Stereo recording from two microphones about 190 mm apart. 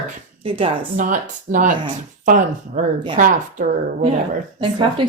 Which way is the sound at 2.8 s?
40° right (ahead or behind).